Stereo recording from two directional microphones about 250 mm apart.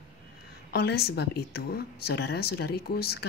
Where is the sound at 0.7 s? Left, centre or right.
Left.